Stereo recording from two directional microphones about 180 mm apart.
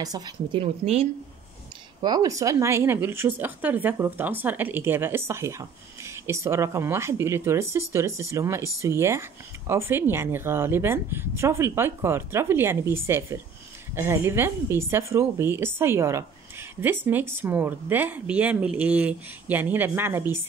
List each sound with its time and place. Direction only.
0.0 s a woman's voice: 20° right (ahead or behind)
0.6 s speech: 35° right (ahead or behind)
2.0 s speech: 25° right (ahead or behind)